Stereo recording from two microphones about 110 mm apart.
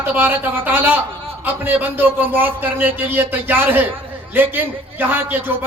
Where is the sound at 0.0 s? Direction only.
15° right (ahead or behind).